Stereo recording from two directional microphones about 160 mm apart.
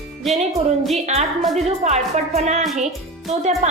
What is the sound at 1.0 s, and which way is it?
A woman's voice, 45° right (ahead or behind).